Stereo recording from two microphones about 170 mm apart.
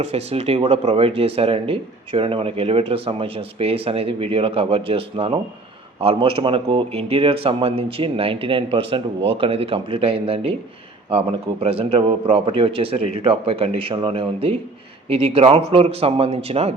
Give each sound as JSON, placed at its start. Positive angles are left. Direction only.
{"t": 0.0, "sound": "speech", "side_deg": -35}